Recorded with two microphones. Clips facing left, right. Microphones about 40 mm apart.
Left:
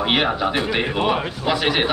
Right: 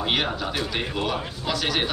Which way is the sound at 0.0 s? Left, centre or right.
Left.